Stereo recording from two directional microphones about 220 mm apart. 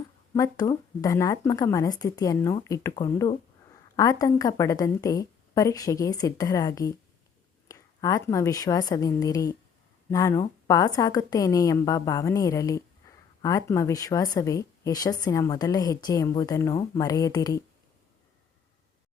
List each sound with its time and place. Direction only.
0.3 s speech: 15° left (ahead or behind)